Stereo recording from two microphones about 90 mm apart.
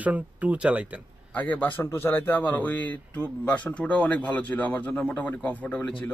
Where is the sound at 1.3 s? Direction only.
15° left (ahead or behind).